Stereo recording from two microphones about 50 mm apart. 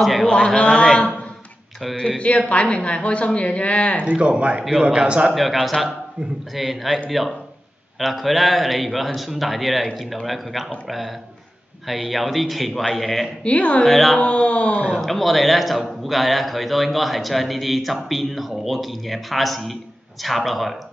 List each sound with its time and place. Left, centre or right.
0.0 s a man's voice: centre
0.6 s a sound: centre
2.0 s speech: left
4.1 s speech: right
5.3 s a man's voice: centre
13.4 s speech: left
13.8 s a man's voice: centre
14.2 s speech: left
15.0 s a man's voice: centre